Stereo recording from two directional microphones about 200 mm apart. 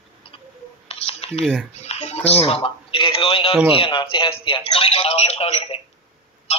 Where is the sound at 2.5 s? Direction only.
25° left (ahead or behind).